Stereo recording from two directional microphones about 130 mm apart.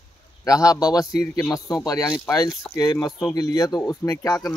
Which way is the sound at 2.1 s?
20° left (ahead or behind).